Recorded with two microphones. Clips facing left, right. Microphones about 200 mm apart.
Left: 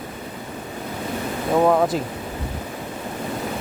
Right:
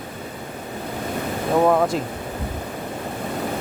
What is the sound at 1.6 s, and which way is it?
Speech, centre (ahead or behind).